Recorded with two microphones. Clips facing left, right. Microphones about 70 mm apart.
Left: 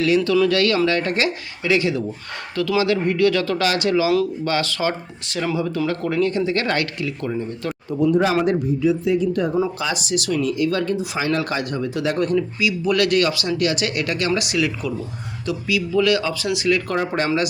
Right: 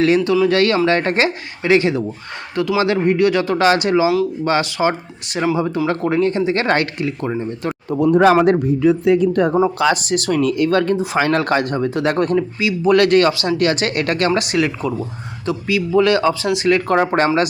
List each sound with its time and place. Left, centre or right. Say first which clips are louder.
0.4 s speech: right 3 dB; right
7.7 s a sound: right 6 dB; right
8.0 s speech: right 6 dB; right
9.7 s speech: right 8 dB; right
10.0 s speech: right 4 dB; right
11.2 s speech: right 7 dB; right